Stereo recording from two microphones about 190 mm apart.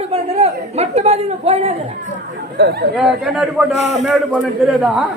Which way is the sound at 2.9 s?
5° right (ahead or behind).